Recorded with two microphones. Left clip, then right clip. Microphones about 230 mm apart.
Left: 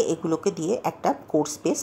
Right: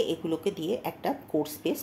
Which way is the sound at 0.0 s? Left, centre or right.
Left.